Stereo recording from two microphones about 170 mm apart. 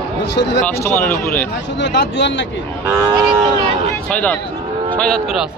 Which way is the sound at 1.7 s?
90° left.